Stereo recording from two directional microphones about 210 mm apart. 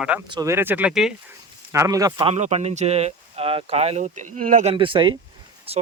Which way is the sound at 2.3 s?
30° right (ahead or behind).